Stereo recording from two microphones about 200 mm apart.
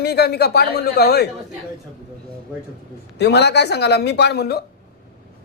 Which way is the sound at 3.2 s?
55° left (ahead or behind).